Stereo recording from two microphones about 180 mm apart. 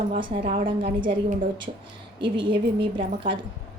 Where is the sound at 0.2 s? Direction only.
30° right (ahead or behind).